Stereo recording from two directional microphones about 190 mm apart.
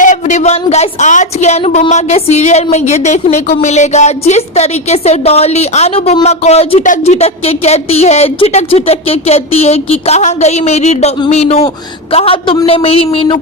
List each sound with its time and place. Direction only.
0.0 s a woman's voice: 40° left (ahead or behind)